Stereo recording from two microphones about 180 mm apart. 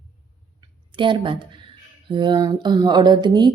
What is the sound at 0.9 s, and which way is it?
Speech, 25° right (ahead or behind).